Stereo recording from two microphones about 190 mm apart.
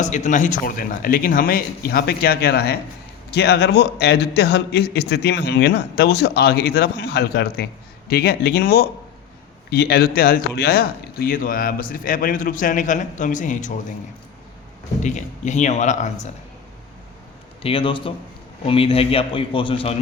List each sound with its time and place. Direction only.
0.0 s a man's voice: 40° left (ahead or behind)
15.0 s speech: 40° left (ahead or behind)
17.6 s a man's voice: 30° left (ahead or behind)